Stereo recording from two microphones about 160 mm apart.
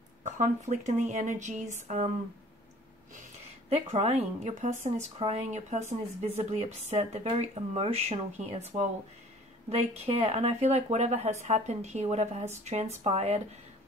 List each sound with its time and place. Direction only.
0.2 s speech: 50° right (ahead or behind)
3.7 s speech: 40° right (ahead or behind)